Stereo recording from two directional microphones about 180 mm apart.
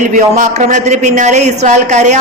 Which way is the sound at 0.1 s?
40° right (ahead or behind).